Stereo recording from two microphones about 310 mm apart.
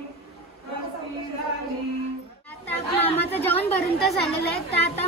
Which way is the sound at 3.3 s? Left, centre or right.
Centre.